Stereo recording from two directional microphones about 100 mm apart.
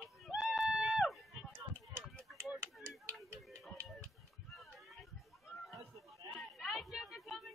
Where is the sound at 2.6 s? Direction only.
30° right (ahead or behind).